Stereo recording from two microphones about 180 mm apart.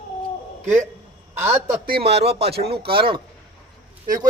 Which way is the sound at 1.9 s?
65° right (ahead or behind).